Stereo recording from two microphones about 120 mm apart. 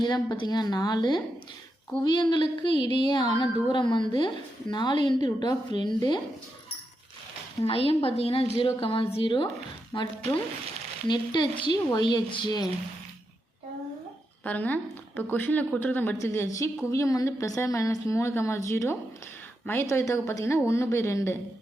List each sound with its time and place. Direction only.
0.0 s a woman's voice: 40° left (ahead or behind)
7.6 s a woman's voice: 55° left (ahead or behind)
14.4 s a woman's voice: 15° left (ahead or behind)